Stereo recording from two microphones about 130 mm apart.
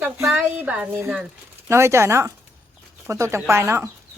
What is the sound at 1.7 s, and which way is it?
Speech, 20° right (ahead or behind).